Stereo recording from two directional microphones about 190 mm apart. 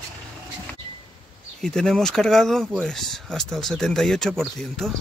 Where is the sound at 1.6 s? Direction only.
5° left (ahead or behind).